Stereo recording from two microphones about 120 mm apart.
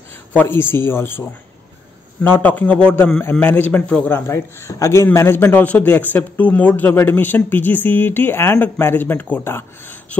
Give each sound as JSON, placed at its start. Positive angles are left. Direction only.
{"t": 0.4, "sound": "a man's voice", "side_deg": 20}
{"t": 2.4, "sound": "a man's voice", "side_deg": 10}